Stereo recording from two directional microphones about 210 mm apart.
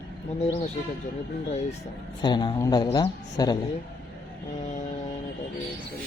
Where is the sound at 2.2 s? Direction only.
20° left (ahead or behind).